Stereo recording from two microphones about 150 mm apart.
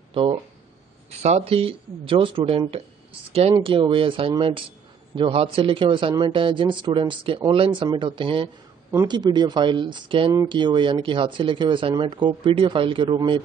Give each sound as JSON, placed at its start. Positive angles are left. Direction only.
{"t": 0.1, "sound": "speech", "side_deg": -35}
{"t": 3.6, "sound": "speech", "side_deg": -35}